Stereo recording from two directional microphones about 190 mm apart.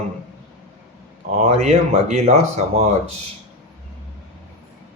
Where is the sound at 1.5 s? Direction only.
35° right (ahead or behind).